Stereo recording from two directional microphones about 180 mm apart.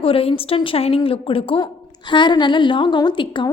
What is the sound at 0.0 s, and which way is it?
A woman's voice, 30° left (ahead or behind).